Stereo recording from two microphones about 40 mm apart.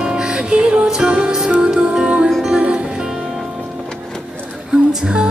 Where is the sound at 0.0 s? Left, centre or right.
Right.